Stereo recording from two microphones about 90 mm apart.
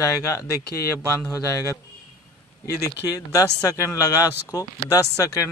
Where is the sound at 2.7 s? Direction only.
40° left (ahead or behind).